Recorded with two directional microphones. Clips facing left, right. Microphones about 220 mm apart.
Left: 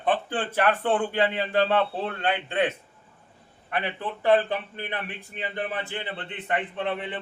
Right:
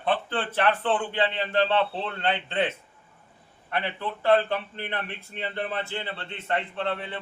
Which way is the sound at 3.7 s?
15° left (ahead or behind).